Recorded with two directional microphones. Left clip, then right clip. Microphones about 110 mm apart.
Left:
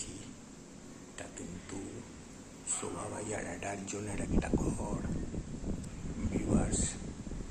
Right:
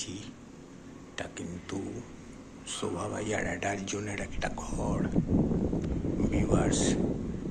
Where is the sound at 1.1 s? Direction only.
5° right (ahead or behind).